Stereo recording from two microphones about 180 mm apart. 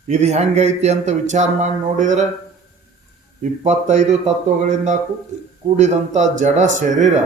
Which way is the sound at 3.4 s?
40° right (ahead or behind).